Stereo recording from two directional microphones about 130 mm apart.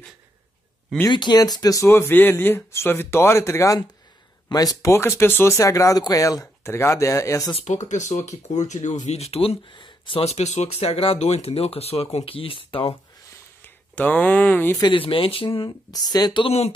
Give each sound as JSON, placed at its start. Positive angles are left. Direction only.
{"t": 1.0, "sound": "speech", "side_deg": 35}
{"t": 7.5, "sound": "speech", "side_deg": 60}
{"t": 13.6, "sound": "speech", "side_deg": 15}
{"t": 14.8, "sound": "speech", "side_deg": 40}
{"t": 15.9, "sound": "speech", "side_deg": 30}
{"t": 16.4, "sound": "speech", "side_deg": 55}